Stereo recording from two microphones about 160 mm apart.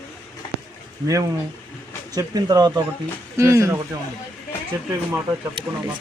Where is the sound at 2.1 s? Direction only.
25° right (ahead or behind).